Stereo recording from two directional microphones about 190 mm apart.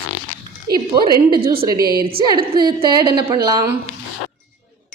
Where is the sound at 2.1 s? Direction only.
20° right (ahead or behind).